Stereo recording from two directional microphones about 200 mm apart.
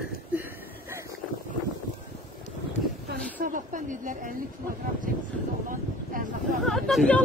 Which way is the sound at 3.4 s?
40° right (ahead or behind).